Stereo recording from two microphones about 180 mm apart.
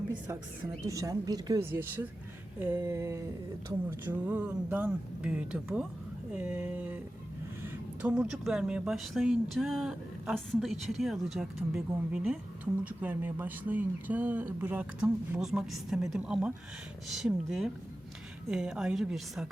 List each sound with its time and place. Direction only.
0.9 s speech: 20° right (ahead or behind); by 19.5 s centre (ahead or behind)